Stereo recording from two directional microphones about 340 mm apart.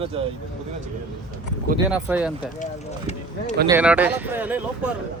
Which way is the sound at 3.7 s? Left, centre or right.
Centre.